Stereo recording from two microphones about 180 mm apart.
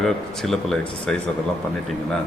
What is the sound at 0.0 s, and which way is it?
Speech, centre (ahead or behind).